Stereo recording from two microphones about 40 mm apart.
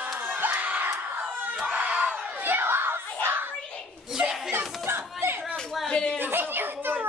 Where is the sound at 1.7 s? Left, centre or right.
Right.